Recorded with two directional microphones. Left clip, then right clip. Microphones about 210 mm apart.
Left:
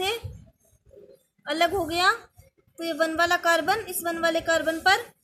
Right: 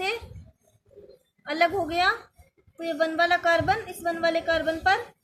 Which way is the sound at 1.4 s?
20° left (ahead or behind).